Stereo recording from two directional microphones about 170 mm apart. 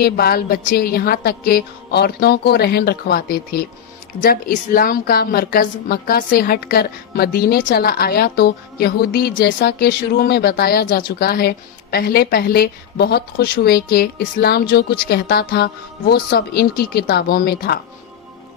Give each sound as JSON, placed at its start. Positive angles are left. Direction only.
{"t": 0.0, "sound": "a woman's voice", "side_deg": 65}